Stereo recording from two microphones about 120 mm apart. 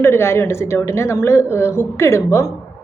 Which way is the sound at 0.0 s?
20° left (ahead or behind).